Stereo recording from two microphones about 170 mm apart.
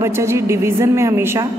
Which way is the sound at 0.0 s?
15° right (ahead or behind).